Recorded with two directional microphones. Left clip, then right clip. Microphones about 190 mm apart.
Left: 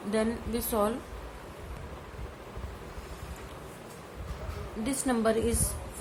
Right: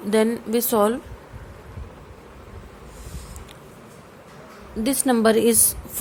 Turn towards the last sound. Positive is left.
turn(degrees=-45)  # may be behind; listen again after turning